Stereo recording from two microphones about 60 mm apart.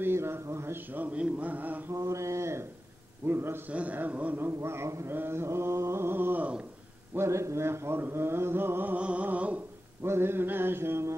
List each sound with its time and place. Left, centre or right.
0.0 s speech: right
0.9 s a man's voice: right
2.0 s a sound: right
3.3 s mantra: right
3.6 s a man's voice: right
4.6 s speech: right
5.1 s speech: right
7.2 s speech: right
8.9 s a man's voice: right
10.0 s mantra: right